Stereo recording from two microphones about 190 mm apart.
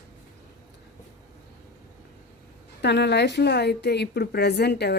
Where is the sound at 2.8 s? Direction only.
60° left (ahead or behind).